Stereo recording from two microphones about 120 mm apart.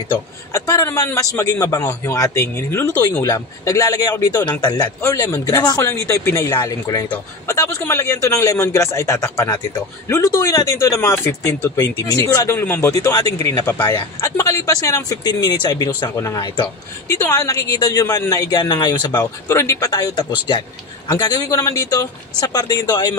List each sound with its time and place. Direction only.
0.5 s speech: 25° left (ahead or behind)
3.0 s speech: 35° left (ahead or behind)
12.9 s speech: 30° left (ahead or behind)